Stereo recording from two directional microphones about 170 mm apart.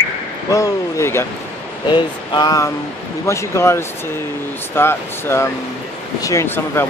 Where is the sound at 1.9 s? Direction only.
25° left (ahead or behind).